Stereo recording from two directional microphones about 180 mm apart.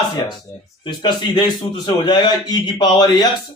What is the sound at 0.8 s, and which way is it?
A man's voice, 25° left (ahead or behind).